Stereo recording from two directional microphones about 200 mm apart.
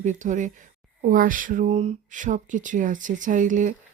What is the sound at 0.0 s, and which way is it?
Speech, 40° right (ahead or behind).